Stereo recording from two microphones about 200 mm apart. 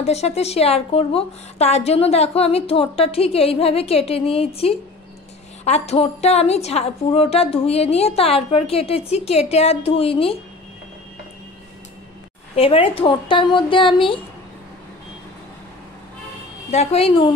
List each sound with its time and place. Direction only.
0.0 s a woman's voice: 30° left (ahead or behind)
12.5 s a woman's voice: 30° left (ahead or behind)
16.7 s a woman's voice: 30° left (ahead or behind)